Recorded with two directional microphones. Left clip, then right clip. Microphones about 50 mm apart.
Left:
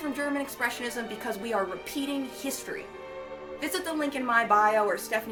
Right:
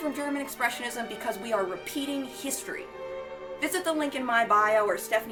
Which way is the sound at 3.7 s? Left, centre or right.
Right.